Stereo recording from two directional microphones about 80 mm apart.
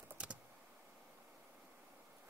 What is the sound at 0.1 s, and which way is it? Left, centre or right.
Computer keyboard, centre.